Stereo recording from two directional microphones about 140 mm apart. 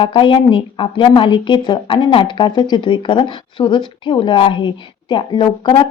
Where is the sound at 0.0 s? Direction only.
35° left (ahead or behind).